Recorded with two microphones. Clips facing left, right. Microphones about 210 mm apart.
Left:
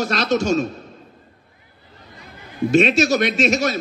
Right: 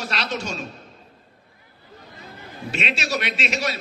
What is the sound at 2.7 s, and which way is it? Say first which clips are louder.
A man's voice: left 12 dB; 45° left (ahead or behind).